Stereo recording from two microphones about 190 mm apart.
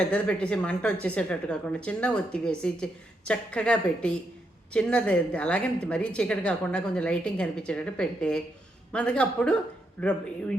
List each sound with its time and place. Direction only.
0.1 s a woman's voice: 5° left (ahead or behind)